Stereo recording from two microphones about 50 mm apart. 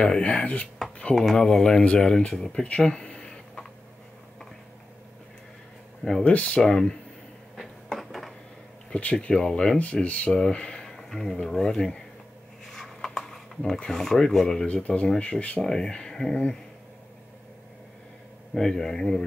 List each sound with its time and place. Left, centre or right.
0.0 s speech: centre
1.1 s speech: centre
6.2 s speech: left
8.0 s a sound: centre
8.9 s speech: left
10.0 s speech: left
11.0 s a sound: centre
11.4 s speech: centre
12.6 s a sound: centre
13.8 s speech: centre
14.6 s speech: left
15.6 s speech: centre
18.5 s speech: centre